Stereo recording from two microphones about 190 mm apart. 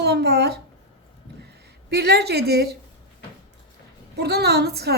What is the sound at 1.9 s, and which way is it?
Speech, 60° right (ahead or behind).